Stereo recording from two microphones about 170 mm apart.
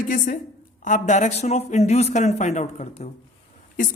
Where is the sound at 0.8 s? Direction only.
50° left (ahead or behind).